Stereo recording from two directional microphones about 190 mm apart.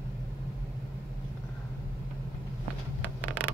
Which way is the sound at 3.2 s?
5° right (ahead or behind).